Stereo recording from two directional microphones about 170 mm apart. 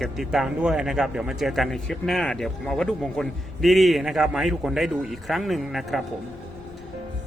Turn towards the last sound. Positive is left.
turn(degrees=0)  # may be behind; listen again after turning